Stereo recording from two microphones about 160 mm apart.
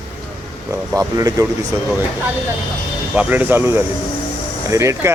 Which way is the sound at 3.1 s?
10° right (ahead or behind).